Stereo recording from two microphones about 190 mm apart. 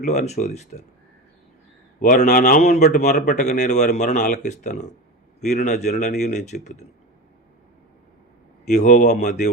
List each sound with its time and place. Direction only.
0.0 s speech: 40° left (ahead or behind)
2.0 s speech: 40° left (ahead or behind)
8.6 s speech: 40° left (ahead or behind)